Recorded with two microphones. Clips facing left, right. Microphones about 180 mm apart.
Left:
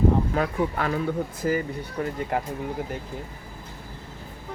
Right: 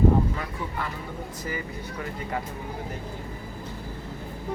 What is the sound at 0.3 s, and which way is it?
Speech, 75° left (ahead or behind).